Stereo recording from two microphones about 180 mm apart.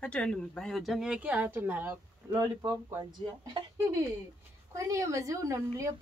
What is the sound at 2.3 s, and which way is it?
A woman's voice, 20° right (ahead or behind).